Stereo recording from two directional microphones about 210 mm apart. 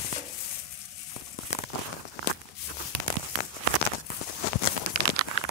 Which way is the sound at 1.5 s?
55° left (ahead or behind).